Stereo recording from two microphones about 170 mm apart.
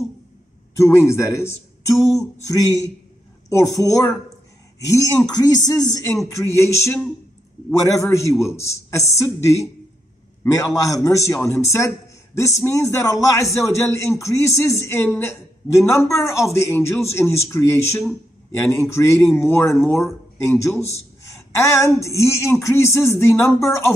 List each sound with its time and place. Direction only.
0.7 s speech: 15° left (ahead or behind)
8.1 s a man's voice: 15° left (ahead or behind)